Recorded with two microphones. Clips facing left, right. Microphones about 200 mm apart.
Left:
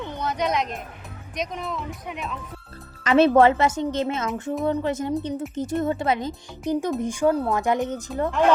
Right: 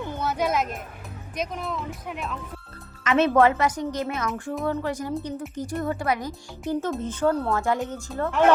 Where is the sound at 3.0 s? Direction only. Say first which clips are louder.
Left 3 dB; 30° left (ahead or behind).